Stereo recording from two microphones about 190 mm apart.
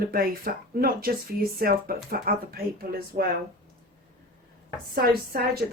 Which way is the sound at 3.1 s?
35° right (ahead or behind).